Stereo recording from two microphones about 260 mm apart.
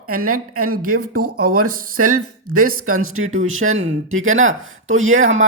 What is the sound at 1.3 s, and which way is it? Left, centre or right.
A woman's voice, right.